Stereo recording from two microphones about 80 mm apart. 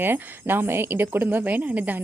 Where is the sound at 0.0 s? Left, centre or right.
Right.